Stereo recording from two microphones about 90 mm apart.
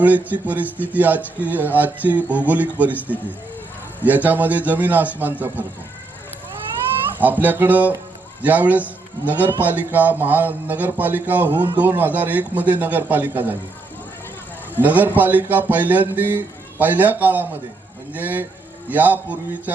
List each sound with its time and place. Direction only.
0.0 s a man's voice: 20° right (ahead or behind)
7.2 s speech: 20° right (ahead or behind)
14.8 s speech: 20° right (ahead or behind)